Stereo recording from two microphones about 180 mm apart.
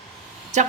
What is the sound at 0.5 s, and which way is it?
Speech, 40° right (ahead or behind).